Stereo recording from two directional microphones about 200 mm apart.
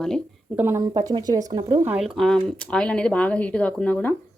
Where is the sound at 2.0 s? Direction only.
Centre (ahead or behind).